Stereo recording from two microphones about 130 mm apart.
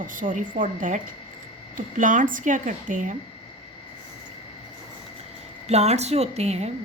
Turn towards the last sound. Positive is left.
turn(degrees=-55)  # may be behind; listen again after turning